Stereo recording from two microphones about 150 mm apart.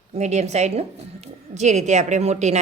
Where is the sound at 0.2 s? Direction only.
50° right (ahead or behind).